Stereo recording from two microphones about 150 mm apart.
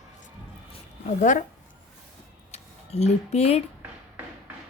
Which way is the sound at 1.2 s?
60° left (ahead or behind).